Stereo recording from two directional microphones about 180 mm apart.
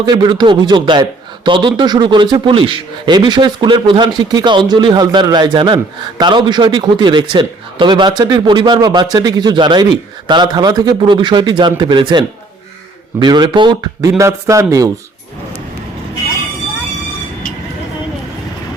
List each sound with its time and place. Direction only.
0.0 s a man's voice: 25° right (ahead or behind)